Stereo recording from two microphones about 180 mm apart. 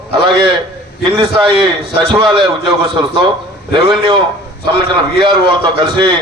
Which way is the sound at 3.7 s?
25° right (ahead or behind).